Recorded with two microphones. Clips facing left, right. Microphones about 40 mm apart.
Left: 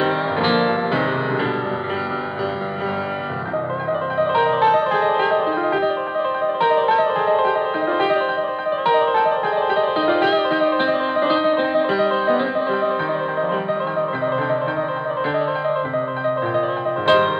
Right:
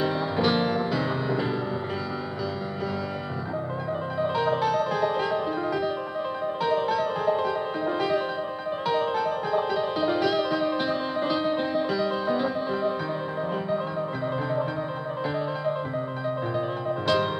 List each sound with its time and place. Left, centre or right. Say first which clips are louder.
0.0 s music: left 6 dB; left
4.2 s music: left 8 dB; left
16.5 s music: left 7 dB; left